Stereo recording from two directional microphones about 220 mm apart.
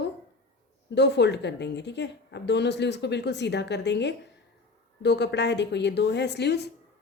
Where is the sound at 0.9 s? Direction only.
50° left (ahead or behind).